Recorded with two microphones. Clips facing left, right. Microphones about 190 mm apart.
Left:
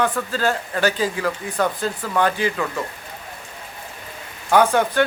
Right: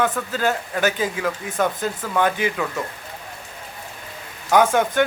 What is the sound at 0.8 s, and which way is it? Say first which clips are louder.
A man's voice: left 2 dB; 20° right (ahead or behind).